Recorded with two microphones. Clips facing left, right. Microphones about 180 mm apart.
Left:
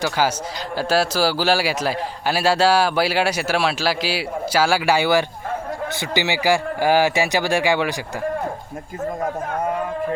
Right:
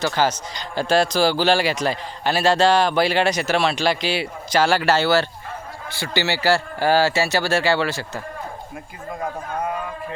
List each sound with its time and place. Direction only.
0.0 s a man's voice: 10° left (ahead or behind)